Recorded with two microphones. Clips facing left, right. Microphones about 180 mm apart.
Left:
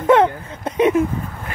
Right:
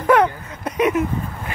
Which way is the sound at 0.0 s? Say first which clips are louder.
Left 2 dB; 25° left (ahead or behind).